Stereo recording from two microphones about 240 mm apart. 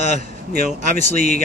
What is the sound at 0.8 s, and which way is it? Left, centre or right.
Speech, right.